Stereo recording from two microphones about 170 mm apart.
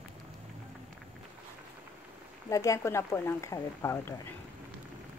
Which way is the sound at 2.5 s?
20° left (ahead or behind).